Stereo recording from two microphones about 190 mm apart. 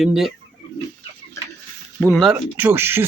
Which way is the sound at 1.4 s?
15° left (ahead or behind).